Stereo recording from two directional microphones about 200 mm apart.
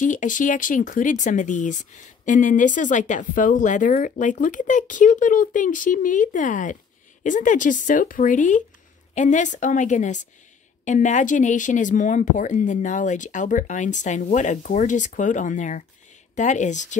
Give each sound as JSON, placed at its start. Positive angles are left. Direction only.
{"t": 0.0, "sound": "speech", "side_deg": 40}